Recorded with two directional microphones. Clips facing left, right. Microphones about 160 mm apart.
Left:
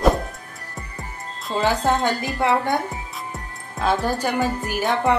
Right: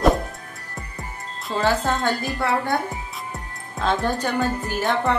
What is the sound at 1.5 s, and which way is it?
Speech, 15° left (ahead or behind).